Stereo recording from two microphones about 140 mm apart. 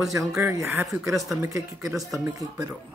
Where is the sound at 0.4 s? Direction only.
20° right (ahead or behind).